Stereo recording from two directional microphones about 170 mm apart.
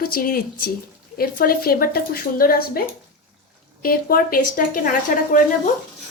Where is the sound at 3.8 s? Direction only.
60° left (ahead or behind).